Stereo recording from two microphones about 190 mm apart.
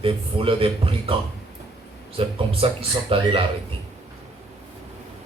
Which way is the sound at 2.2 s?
30° right (ahead or behind).